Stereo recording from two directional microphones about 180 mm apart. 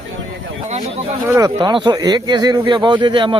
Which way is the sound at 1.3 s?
20° right (ahead or behind).